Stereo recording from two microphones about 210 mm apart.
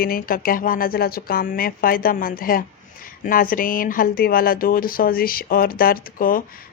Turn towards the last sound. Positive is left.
turn(degrees=40)  # may be behind; listen again after turning